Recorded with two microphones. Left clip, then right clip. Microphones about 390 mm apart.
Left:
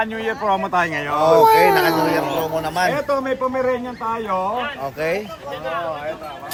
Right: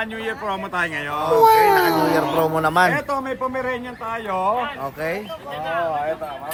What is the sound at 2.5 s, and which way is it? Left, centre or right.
Speech, right.